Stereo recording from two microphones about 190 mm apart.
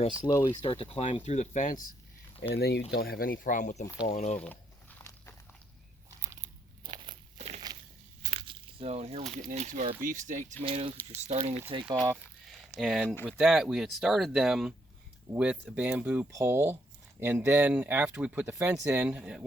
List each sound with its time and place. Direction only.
0.3 s speech: 15° left (ahead or behind)
0.6 s speech: 30° left (ahead or behind)
2.6 s speech: 60° left (ahead or behind); by 4.4 s 35° left (ahead or behind)
6.8 s biting: 25° right (ahead or behind)
7.3 s a sound: 35° right (ahead or behind)
9.3 s speech: 40° right (ahead or behind)
10.6 s speech: 30° right (ahead or behind)
12.1 s a sound: centre (ahead or behind)
13.2 s speech: 5° right (ahead or behind)